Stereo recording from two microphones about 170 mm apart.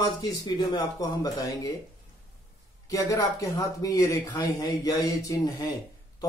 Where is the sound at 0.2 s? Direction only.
25° left (ahead or behind).